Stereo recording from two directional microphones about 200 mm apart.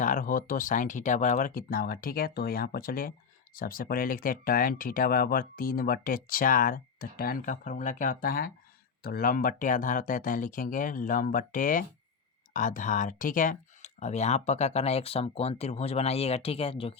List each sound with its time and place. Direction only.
0.0 s speech: 40° left (ahead or behind)